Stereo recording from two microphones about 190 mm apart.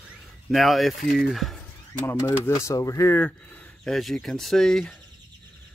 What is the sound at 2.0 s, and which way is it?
Speech, 15° left (ahead or behind).